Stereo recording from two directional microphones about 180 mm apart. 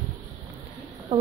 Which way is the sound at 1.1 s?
35° right (ahead or behind).